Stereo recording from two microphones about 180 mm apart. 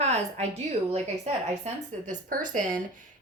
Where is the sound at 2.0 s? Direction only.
45° right (ahead or behind).